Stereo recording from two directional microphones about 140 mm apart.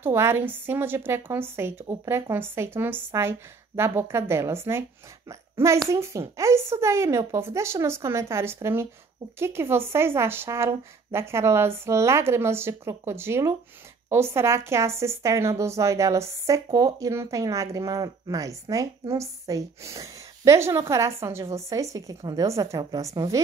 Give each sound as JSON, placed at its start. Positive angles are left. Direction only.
{"t": 0.0, "sound": "a woman's voice", "side_deg": -20}